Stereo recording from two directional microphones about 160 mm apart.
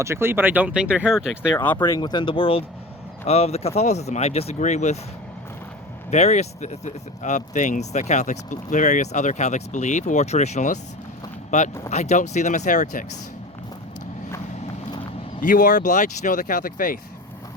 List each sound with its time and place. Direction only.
0.0 s speech: 15° right (ahead or behind)
1.5 s speech: 10° left (ahead or behind)
2.0 s speech: 30° left (ahead or behind); by 4.9 s 45° left (ahead or behind)
6.1 s speech: 45° left (ahead or behind)
15.4 s speech: 55° left (ahead or behind)